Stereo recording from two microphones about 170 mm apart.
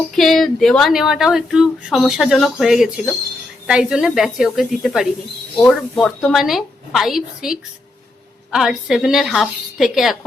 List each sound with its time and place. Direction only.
0.2 s speech: centre (ahead or behind)